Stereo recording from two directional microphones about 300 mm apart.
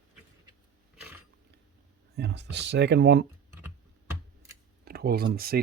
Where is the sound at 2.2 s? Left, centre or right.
Right.